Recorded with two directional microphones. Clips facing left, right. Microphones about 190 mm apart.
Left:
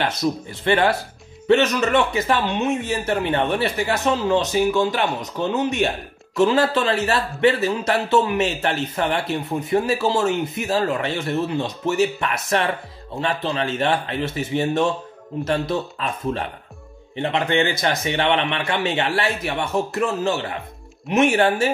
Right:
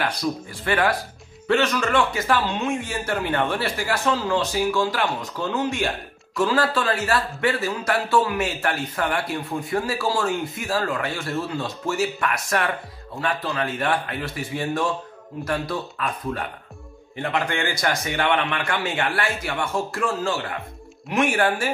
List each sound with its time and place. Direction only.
0.0 s speech: 20° left (ahead or behind)